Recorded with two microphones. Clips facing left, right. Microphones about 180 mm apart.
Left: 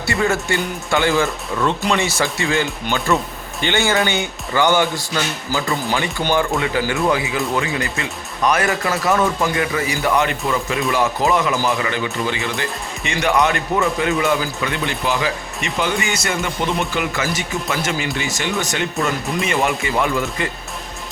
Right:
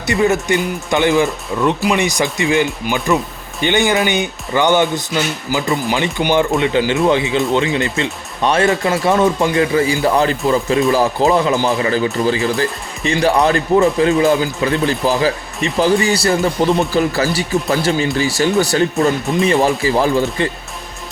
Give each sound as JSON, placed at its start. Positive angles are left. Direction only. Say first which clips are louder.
{"t": 0.0, "sound": "speech", "louder": "right 4 dB", "side_deg": -20}